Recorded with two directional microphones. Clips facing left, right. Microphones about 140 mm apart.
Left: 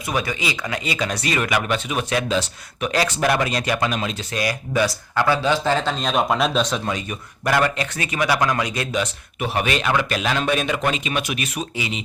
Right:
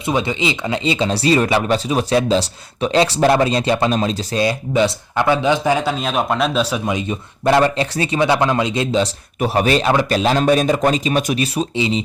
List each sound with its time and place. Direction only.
0.0 s speech: 25° right (ahead or behind)